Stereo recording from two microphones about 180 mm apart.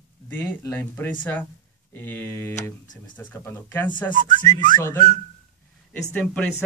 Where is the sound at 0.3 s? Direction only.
10° left (ahead or behind).